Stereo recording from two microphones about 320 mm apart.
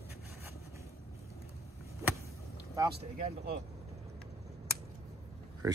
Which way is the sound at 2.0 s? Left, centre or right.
Centre.